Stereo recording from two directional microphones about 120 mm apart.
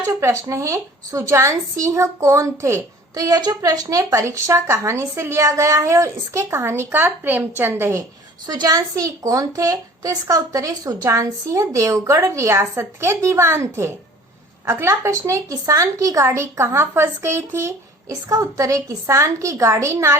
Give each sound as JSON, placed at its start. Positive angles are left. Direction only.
{"t": 0.0, "sound": "a woman's voice", "side_deg": -25}
{"t": 8.4, "sound": "a woman's voice", "side_deg": -35}